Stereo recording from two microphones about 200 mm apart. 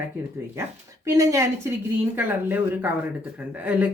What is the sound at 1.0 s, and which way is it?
Speech, 15° right (ahead or behind).